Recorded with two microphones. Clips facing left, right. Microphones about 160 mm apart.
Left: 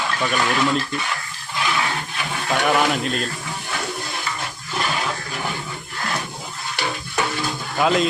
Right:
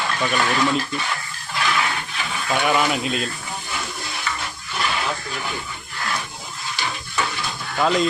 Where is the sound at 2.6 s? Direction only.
Centre (ahead or behind).